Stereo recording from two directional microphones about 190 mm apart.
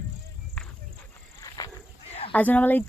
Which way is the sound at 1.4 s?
20° left (ahead or behind).